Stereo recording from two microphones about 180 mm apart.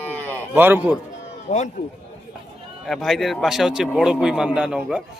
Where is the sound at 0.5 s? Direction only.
10° right (ahead or behind).